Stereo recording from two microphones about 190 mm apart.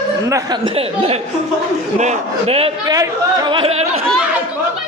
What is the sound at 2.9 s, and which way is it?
Speech, 20° right (ahead or behind).